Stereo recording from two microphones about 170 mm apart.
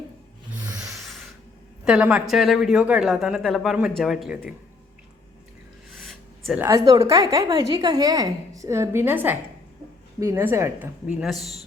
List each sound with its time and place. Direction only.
0.7 s rub: 20° right (ahead or behind)
1.8 s speech: 5° right (ahead or behind)
6.0 s a sound: centre (ahead or behind)
6.6 s a woman's voice: 20° right (ahead or behind)